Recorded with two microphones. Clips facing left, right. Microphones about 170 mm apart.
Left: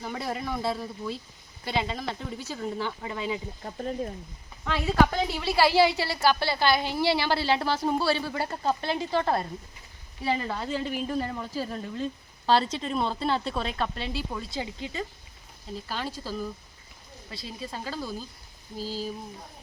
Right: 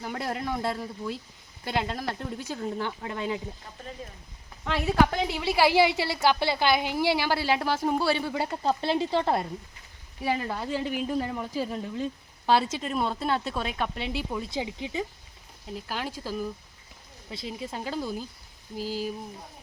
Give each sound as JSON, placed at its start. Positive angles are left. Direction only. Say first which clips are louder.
{"t": 0.0, "sound": "a woman's voice", "louder": "right 1 dB", "side_deg": -5}
{"t": 0.3, "sound": "a man's voice", "louder": "even", "side_deg": 5}
{"t": 0.8, "sound": "a woman's voice", "louder": "even", "side_deg": -10}
{"t": 2.6, "sound": "speech", "louder": "left 1 dB", "side_deg": 0}
{"t": 3.6, "sound": "speech", "louder": "left 9 dB", "side_deg": 45}
{"t": 4.6, "sound": "speech", "louder": "right 1 dB", "side_deg": -5}
{"t": 5.1, "sound": "a woman's voice", "louder": "even", "side_deg": -15}
{"t": 10.2, "sound": "a woman's voice", "louder": "even", "side_deg": -10}
{"t": 13.7, "sound": "a woman's voice", "louder": "even", "side_deg": -15}